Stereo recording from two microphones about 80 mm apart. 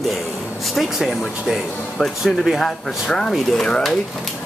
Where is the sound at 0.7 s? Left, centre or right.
Centre.